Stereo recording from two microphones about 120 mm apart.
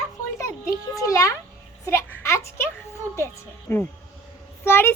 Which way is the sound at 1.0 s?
25° left (ahead or behind).